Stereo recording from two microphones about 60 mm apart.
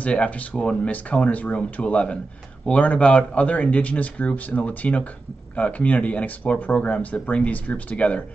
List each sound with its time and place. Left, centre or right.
0.0 s speech: left